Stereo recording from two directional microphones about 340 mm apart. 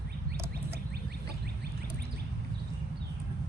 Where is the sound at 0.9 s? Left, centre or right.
Right.